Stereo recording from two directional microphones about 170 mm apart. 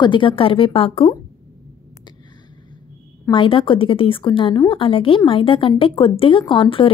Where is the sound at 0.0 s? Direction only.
30° left (ahead or behind).